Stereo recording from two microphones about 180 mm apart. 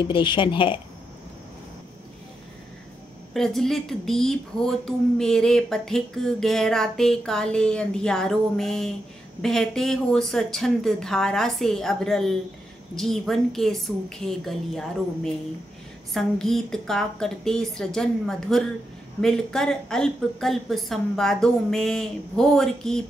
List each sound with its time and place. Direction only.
0.0 s speech: 25° left (ahead or behind)
3.3 s a woman's voice: centre (ahead or behind)
16.1 s a woman's voice: centre (ahead or behind)